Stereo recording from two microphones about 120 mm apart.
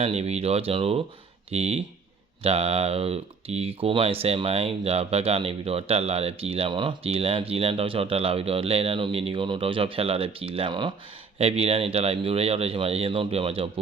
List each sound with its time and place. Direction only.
0.0 s speech: 60° right (ahead or behind); by 10.9 s 40° right (ahead or behind)
11.3 s speech: 55° right (ahead or behind)